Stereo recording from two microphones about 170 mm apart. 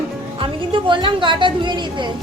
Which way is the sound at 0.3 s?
30° right (ahead or behind).